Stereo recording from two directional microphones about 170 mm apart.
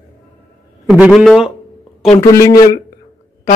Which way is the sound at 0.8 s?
5° right (ahead or behind).